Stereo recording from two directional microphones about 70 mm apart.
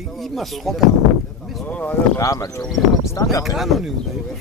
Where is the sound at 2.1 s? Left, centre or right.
Left.